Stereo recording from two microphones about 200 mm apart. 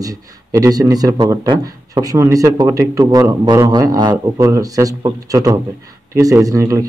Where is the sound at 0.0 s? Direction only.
15° right (ahead or behind).